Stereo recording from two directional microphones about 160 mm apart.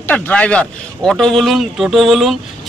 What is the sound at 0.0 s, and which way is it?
A man's voice, 10° left (ahead or behind).